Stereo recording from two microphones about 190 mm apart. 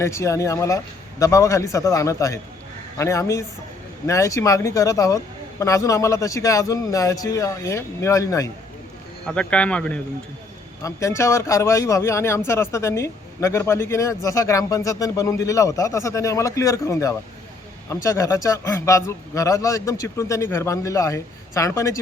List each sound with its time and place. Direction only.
0.0 s speech: 15° left (ahead or behind)
9.2 s a man's voice: 5° left (ahead or behind)